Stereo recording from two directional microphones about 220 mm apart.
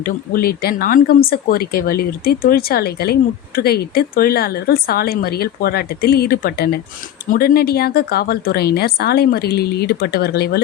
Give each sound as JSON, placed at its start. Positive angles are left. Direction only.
{"t": 0.0, "sound": "speech", "side_deg": 45}